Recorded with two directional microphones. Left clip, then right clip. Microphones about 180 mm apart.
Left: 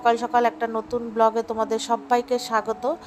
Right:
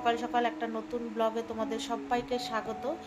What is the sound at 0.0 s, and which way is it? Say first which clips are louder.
Speech: left 9 dB; 40° left (ahead or behind).